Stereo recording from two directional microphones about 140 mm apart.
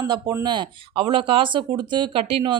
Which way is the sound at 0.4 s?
35° right (ahead or behind).